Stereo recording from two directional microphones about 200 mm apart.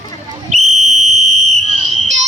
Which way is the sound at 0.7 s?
35° right (ahead or behind).